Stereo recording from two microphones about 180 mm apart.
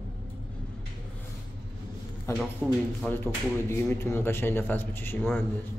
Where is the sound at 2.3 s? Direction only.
15° left (ahead or behind).